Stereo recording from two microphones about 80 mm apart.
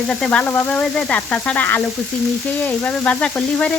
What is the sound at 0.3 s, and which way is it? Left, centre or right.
Speech, left.